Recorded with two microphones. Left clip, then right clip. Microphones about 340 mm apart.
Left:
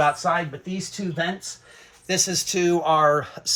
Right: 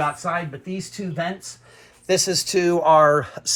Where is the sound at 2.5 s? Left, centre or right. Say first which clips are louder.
Right 5 dB; right.